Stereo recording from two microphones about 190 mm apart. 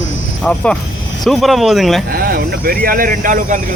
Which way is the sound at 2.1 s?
50° right (ahead or behind).